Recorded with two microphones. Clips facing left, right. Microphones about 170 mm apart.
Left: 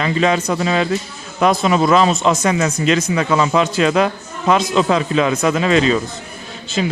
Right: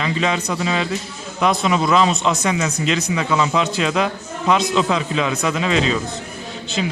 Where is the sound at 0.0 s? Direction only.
50° left (ahead or behind).